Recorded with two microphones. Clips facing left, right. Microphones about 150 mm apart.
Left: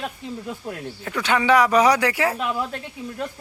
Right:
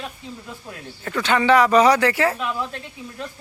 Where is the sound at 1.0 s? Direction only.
10° left (ahead or behind).